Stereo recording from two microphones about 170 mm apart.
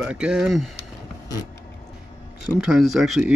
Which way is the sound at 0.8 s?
20° left (ahead or behind).